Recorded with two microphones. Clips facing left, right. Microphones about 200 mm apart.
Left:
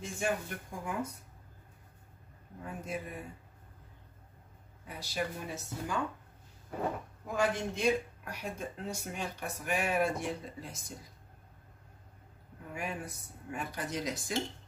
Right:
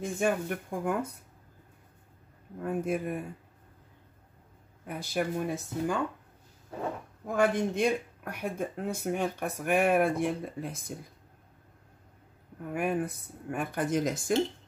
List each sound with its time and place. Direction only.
0.0 s speech: 55° right (ahead or behind)
2.6 s speech: 55° right (ahead or behind)
4.8 s speech: 55° right (ahead or behind)
7.3 s speech: 55° right (ahead or behind)
12.7 s speech: 55° right (ahead or behind)